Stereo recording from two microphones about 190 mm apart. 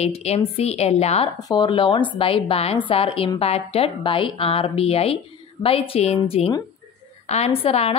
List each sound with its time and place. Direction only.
0.0 s a woman's voice: 35° left (ahead or behind)
1.4 s a woman's voice: 20° left (ahead or behind)